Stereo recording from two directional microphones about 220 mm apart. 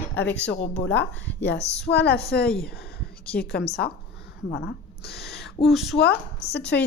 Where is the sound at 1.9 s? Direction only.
45° left (ahead or behind).